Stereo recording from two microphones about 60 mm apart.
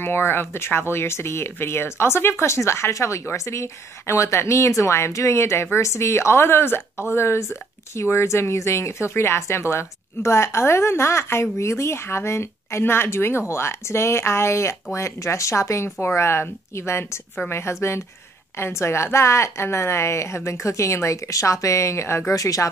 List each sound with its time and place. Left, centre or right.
0.0 s speech: left
22.3 s speech: left